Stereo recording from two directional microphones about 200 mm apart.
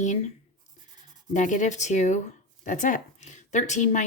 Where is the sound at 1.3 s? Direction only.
40° left (ahead or behind).